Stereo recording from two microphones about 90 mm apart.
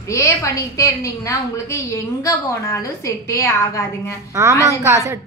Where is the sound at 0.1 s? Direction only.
35° left (ahead or behind).